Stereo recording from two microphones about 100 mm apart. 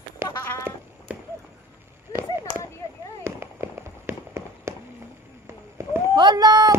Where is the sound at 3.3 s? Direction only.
25° right (ahead or behind).